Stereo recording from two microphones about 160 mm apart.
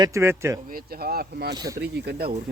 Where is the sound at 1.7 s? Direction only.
90° right.